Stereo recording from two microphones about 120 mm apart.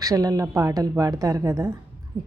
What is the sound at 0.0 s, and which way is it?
A woman's voice, 30° right (ahead or behind).